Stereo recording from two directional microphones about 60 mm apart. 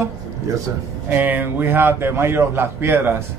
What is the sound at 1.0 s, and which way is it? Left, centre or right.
A man's voice, right.